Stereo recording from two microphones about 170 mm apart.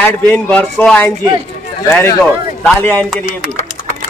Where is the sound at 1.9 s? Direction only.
15° left (ahead or behind).